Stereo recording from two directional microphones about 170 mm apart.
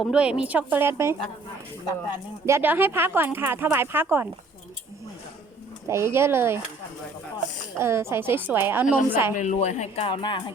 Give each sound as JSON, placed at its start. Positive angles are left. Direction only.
{"t": 0.0, "sound": "speech", "side_deg": -5}
{"t": 2.5, "sound": "speech", "side_deg": -15}
{"t": 5.9, "sound": "speech", "side_deg": -15}
{"t": 7.8, "sound": "speech", "side_deg": -15}
{"t": 9.4, "sound": "speech", "side_deg": 45}